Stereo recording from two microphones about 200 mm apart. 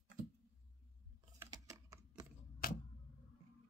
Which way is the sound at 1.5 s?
20° right (ahead or behind).